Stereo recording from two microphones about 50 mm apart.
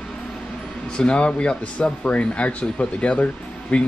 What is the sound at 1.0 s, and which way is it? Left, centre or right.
Speech, centre.